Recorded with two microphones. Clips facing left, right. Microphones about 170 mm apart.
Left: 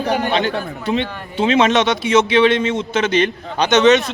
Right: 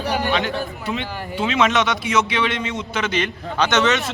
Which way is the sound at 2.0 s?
25° left (ahead or behind).